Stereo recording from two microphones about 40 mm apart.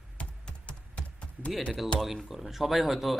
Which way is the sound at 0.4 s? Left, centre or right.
Left.